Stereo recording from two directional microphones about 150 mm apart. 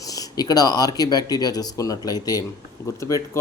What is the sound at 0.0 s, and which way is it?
Speech, 25° left (ahead or behind).